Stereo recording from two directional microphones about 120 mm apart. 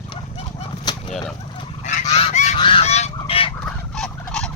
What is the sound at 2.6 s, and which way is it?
Goose, 50° left (ahead or behind).